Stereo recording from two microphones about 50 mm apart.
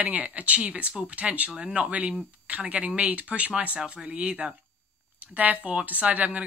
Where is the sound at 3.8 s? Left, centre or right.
Centre.